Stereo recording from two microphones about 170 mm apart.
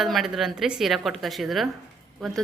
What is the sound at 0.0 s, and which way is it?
A woman's voice, centre (ahead or behind).